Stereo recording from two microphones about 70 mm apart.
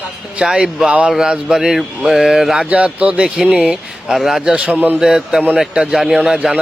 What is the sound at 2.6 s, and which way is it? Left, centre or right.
Speech, centre.